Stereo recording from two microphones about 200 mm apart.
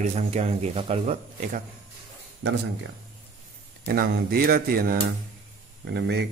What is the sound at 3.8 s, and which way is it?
Speech, 45° right (ahead or behind).